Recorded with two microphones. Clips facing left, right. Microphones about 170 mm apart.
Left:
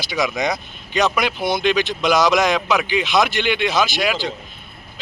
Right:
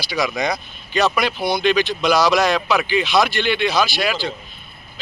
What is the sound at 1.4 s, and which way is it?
Speech, 20° left (ahead or behind).